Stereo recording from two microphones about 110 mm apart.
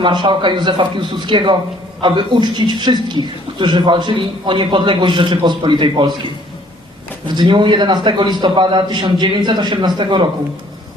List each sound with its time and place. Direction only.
0.0 s speech: 45° right (ahead or behind)
7.3 s speech: 45° right (ahead or behind)